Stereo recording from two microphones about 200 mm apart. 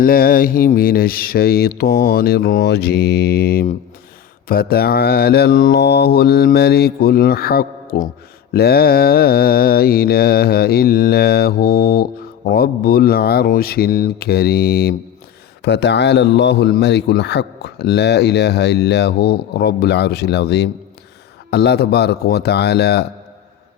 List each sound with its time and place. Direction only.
0.0 s a man's voice: 45° left (ahead or behind)